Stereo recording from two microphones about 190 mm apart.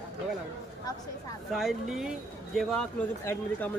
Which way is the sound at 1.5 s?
Centre (ahead or behind).